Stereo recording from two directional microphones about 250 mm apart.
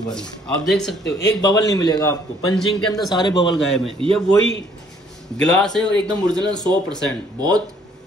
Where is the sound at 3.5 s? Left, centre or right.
Centre.